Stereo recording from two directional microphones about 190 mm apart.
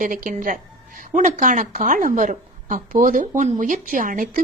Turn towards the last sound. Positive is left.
turn(degrees=-45)  # may be behind; listen again after turning